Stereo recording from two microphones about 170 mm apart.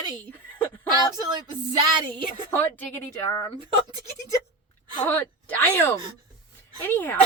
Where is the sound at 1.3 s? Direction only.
25° right (ahead or behind).